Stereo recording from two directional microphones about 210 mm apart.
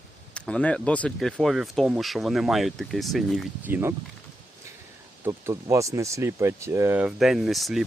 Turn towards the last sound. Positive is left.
turn(degrees=0)  # may be behind; listen again after turning